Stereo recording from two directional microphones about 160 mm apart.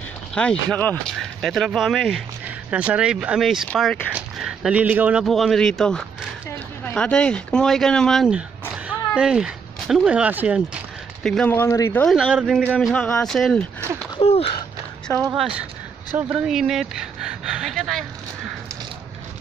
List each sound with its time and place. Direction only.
0.3 s speech: 5° left (ahead or behind)
4.1 s a sound: 5° right (ahead or behind)
5.2 s speech: centre (ahead or behind)
11.2 s speech: 5° left (ahead or behind)
11.5 s speech: 20° left (ahead or behind)
12.0 s speech: centre (ahead or behind)
12.9 s speech: 10° left (ahead or behind)
14.2 s a sound: 40° left (ahead or behind)
15.3 s speech: 5° right (ahead or behind)
16.2 s a sound: 5° right (ahead or behind)